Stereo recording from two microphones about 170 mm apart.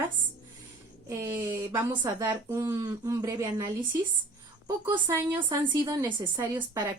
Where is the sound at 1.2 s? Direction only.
15° right (ahead or behind).